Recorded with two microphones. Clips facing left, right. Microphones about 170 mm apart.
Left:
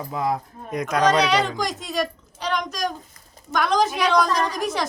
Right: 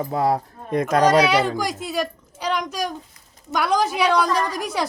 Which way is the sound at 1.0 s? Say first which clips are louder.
Right 1 dB; 10° right (ahead or behind).